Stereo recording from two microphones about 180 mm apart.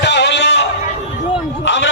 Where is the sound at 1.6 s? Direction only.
85° left.